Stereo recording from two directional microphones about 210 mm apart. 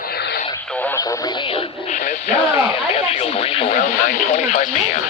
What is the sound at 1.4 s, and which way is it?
Radio, 30° left (ahead or behind).